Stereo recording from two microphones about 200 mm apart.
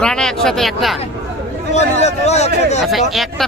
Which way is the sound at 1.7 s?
35° left (ahead or behind).